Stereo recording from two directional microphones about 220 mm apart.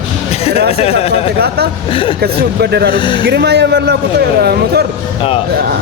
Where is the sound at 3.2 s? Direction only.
50° right (ahead or behind).